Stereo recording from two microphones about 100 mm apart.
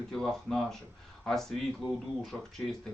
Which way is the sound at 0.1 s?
5° left (ahead or behind).